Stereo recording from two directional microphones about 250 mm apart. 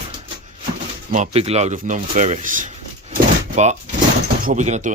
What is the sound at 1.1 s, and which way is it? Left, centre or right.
Speech, right.